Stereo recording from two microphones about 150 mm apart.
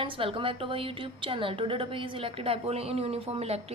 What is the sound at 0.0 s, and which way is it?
A woman's voice, 35° right (ahead or behind).